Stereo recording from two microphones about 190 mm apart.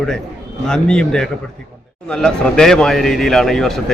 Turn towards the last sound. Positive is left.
turn(degrees=0)  # may be behind; listen again after turning